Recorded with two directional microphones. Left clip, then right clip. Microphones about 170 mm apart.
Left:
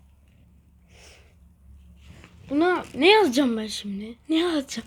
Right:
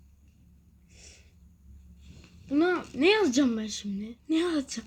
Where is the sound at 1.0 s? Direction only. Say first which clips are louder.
Left 3 dB; centre (ahead or behind).